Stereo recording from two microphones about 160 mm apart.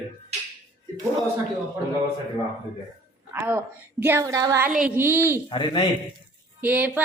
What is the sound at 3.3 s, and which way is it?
A woman's voice, 15° right (ahead or behind).